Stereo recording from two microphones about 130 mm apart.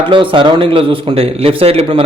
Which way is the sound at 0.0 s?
40° right (ahead or behind).